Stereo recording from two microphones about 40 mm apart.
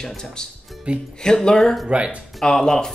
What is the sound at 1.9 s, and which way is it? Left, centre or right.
Speech, right.